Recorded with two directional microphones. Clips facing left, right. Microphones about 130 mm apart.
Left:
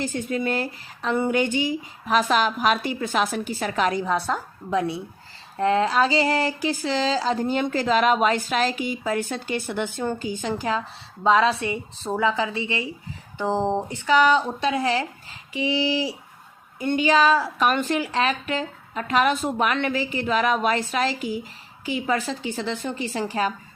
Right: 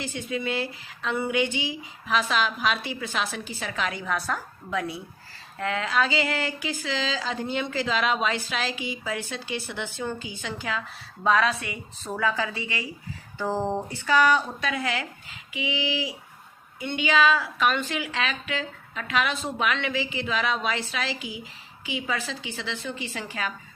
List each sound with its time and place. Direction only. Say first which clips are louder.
0.0 s speech: left 5 dB; 45° left (ahead or behind)
11.2 s a woman's voice: left 4 dB; 25° left (ahead or behind)